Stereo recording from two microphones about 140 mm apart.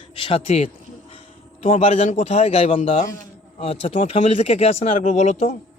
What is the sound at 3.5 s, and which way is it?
A man's voice, 45° left (ahead or behind).